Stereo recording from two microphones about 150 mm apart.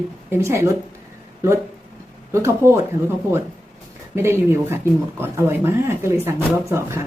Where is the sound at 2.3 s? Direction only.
20° right (ahead or behind).